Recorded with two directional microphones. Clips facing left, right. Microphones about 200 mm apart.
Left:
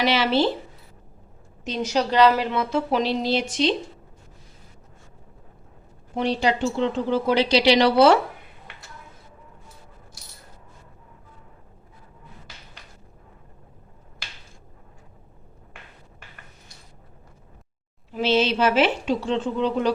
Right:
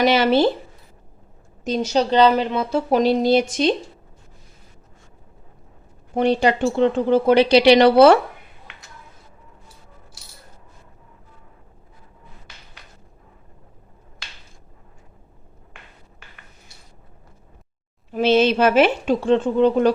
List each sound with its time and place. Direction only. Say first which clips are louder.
0.0 s speech: right 5 dB; 50° right (ahead or behind)
1.9 s speech: right 2 dB; 25° right (ahead or behind)
2.6 s speech: right 5 dB; 40° right (ahead or behind)
6.1 s speech: right 5 dB; 55° right (ahead or behind)
18.1 s speech: right 5 dB; 50° right (ahead or behind)